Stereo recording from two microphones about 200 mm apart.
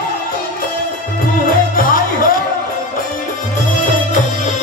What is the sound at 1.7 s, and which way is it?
Music, 45° left (ahead or behind).